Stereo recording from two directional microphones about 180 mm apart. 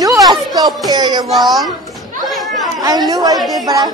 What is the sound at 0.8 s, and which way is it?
Speech, 20° right (ahead or behind).